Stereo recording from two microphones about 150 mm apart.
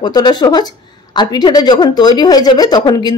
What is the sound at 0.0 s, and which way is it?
Speech, 30° left (ahead or behind).